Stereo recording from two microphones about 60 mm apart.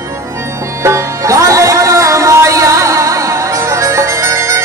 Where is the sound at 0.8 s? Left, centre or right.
Right.